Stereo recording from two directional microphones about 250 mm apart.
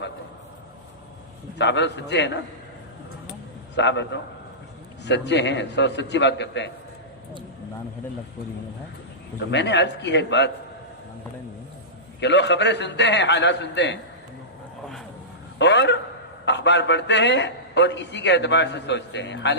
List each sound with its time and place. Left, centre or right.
1.5 s a man's voice: left
3.8 s a man's voice: left
9.5 s a man's voice: left
12.2 s a man's voice: left
15.5 s a man's voice: left